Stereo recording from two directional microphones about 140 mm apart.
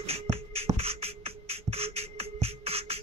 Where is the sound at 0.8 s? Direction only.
45° right (ahead or behind).